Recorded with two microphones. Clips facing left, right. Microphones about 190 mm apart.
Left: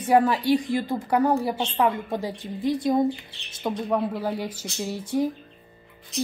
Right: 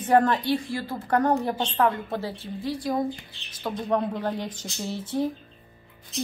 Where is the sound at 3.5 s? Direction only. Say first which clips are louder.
Left 3 dB; 20° left (ahead or behind).